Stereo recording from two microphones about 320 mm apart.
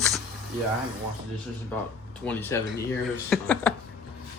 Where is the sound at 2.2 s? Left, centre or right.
Centre.